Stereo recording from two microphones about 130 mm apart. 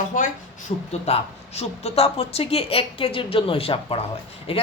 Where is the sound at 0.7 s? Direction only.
55° left (ahead or behind).